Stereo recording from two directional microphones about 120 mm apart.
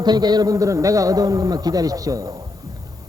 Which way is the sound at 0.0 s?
35° right (ahead or behind).